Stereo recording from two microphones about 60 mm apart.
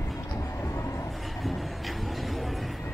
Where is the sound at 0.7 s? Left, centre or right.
Left.